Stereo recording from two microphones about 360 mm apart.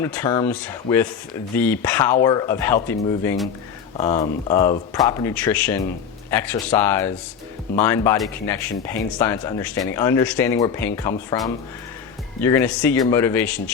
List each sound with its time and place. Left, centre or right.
0.0 s speech: centre
12.4 s speech: centre